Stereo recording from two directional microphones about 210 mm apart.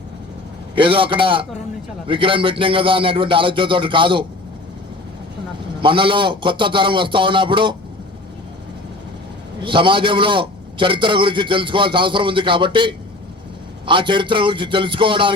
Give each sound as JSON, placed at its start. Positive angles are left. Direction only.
{"t": 0.8, "sound": "a man's voice", "side_deg": -25}
{"t": 5.8, "sound": "a man's voice", "side_deg": -25}
{"t": 9.6, "sound": "a man's voice", "side_deg": -25}